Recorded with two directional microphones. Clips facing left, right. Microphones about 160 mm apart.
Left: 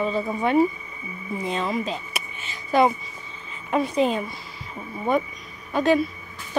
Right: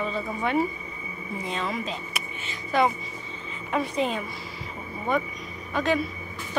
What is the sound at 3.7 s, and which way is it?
Speech, 35° left (ahead or behind).